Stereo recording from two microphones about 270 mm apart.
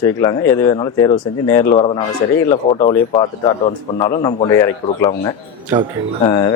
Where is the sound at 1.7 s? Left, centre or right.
Left.